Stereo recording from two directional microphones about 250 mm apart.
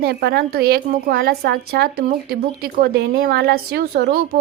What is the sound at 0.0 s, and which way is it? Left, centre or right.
Speech, right.